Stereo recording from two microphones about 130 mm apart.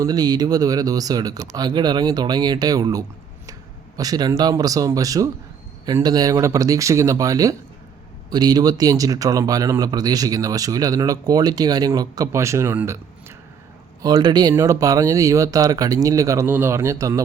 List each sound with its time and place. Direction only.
0.0 s speech: 30° right (ahead or behind)
14.0 s speech: 30° right (ahead or behind)